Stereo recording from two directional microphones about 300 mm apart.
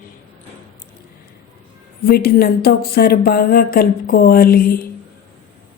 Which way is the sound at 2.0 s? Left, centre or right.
Left.